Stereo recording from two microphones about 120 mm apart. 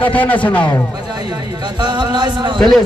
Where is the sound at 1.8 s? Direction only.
40° right (ahead or behind).